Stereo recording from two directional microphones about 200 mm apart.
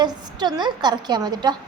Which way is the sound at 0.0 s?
20° right (ahead or behind).